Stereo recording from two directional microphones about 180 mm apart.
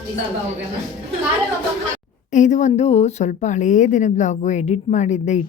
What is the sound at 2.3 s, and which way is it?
A woman's voice, 45° left (ahead or behind).